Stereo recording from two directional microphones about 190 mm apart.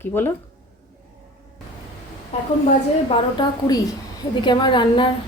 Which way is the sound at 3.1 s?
25° left (ahead or behind).